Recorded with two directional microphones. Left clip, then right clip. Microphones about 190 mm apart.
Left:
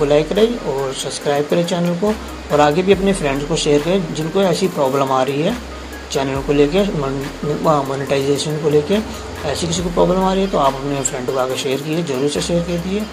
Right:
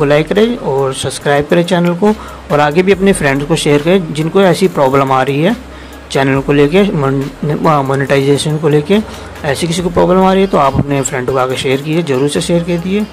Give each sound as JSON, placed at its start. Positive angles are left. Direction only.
{"t": 0.0, "sound": "speech", "side_deg": -45}